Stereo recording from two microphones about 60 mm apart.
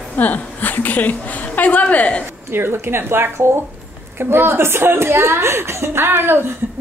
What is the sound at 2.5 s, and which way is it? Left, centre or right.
A woman's voice, right.